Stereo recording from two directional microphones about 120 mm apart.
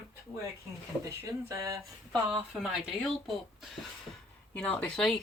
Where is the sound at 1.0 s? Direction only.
25° right (ahead or behind).